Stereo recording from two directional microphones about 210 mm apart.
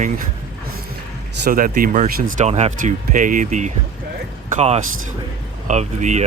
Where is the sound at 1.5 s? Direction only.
40° right (ahead or behind).